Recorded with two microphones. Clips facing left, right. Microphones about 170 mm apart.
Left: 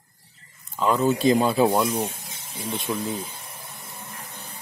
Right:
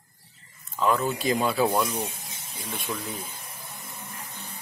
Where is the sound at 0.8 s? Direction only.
20° left (ahead or behind).